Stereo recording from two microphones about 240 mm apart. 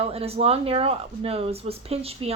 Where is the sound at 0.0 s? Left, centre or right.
Right.